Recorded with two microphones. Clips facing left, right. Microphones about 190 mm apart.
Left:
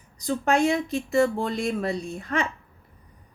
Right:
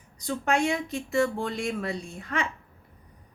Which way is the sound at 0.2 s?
40° left (ahead or behind).